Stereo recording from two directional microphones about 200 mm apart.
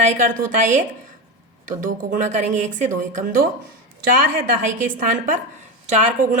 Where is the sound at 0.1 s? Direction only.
40° right (ahead or behind).